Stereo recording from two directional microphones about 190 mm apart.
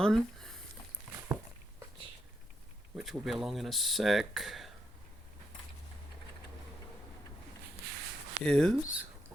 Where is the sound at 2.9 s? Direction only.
Centre (ahead or behind).